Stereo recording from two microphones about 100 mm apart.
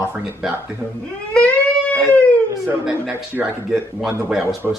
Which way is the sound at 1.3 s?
15° left (ahead or behind).